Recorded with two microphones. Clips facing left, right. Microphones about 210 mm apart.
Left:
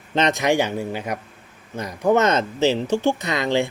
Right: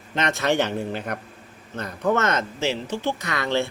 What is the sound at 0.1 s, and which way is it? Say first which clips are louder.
Speech: left 4 dB; 20° left (ahead or behind).